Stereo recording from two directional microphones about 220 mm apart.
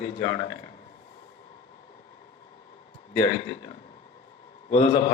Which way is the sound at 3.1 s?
30° left (ahead or behind).